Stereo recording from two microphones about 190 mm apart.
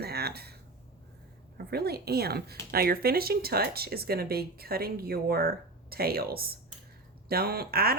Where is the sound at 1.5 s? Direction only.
55° right (ahead or behind).